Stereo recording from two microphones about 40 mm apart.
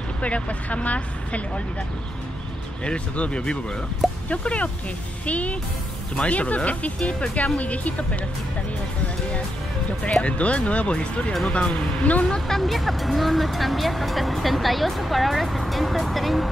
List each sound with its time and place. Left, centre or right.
0.2 s speech: left
2.8 s speech: left
10.2 s speech: left
12.3 s speech: centre